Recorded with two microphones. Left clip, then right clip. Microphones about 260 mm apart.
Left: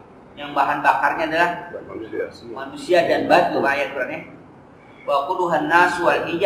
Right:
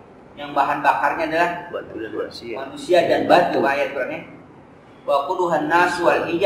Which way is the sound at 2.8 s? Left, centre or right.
Centre.